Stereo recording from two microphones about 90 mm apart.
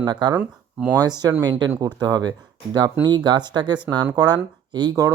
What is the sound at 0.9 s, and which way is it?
Speech, 50° right (ahead or behind).